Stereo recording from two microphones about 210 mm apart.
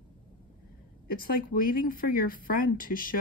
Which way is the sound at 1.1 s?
45° left (ahead or behind).